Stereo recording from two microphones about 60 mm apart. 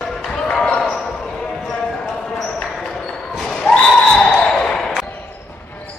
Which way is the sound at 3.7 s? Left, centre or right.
Centre.